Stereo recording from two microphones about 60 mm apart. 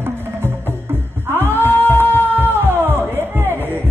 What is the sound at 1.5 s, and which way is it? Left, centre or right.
Music, right.